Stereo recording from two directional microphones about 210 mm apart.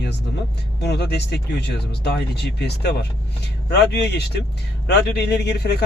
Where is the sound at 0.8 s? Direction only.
50° left (ahead or behind).